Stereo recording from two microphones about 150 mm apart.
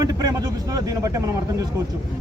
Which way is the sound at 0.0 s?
25° right (ahead or behind).